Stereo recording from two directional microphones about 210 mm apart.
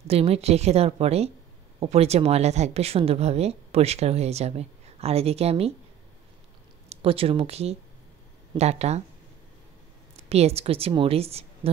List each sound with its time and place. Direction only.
0.0 s speech: 30° right (ahead or behind)
6.9 s speech: 25° right (ahead or behind)
10.1 s speech: 30° right (ahead or behind)